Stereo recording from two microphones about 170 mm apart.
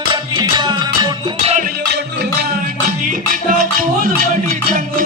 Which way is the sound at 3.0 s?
55° right (ahead or behind).